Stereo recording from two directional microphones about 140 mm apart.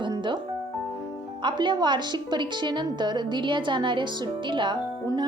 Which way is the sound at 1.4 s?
35° right (ahead or behind).